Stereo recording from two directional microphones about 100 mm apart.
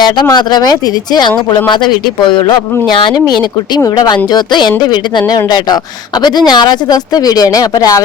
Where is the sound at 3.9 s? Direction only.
45° left (ahead or behind).